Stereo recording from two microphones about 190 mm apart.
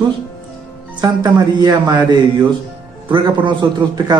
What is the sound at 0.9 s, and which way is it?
Speech, 20° right (ahead or behind).